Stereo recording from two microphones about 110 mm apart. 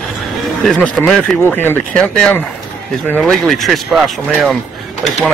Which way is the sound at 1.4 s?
20° left (ahead or behind).